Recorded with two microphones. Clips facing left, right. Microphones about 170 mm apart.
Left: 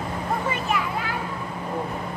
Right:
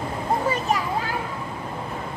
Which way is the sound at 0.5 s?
40° right (ahead or behind).